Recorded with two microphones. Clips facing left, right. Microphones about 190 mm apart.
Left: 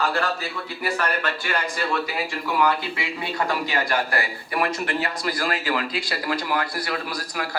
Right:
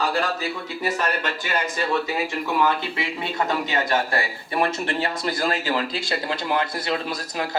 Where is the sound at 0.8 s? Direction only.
20° right (ahead or behind).